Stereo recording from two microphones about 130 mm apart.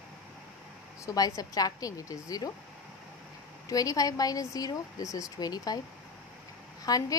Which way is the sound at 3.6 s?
25° left (ahead or behind).